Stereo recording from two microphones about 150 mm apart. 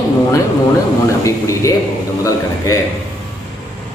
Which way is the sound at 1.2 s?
20° left (ahead or behind).